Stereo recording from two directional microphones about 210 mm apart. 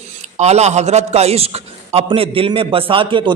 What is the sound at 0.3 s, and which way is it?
A man's voice, 30° right (ahead or behind).